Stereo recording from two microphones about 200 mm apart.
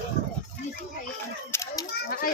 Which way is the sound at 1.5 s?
15° left (ahead or behind).